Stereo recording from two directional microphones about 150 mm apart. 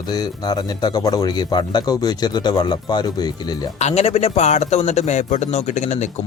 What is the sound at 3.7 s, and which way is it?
A man's voice, 45° left (ahead or behind).